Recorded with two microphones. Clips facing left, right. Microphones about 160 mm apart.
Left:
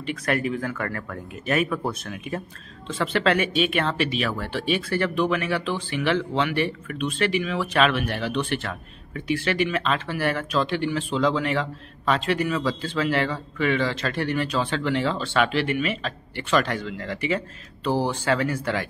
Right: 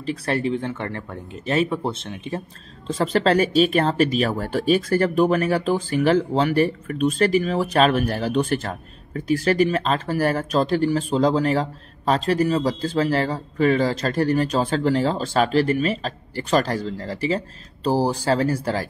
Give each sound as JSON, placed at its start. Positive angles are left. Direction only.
{"t": 0.0, "sound": "speech", "side_deg": -30}
{"t": 2.9, "sound": "speech", "side_deg": -40}